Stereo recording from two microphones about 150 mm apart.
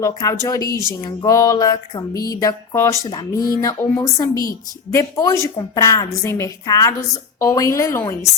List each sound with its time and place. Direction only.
0.0 s speech: 20° left (ahead or behind)